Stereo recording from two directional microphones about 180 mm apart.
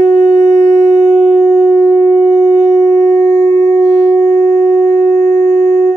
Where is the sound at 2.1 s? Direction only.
15° left (ahead or behind).